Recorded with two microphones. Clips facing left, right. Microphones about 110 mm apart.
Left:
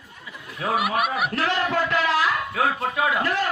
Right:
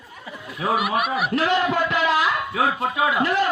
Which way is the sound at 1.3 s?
15° right (ahead or behind).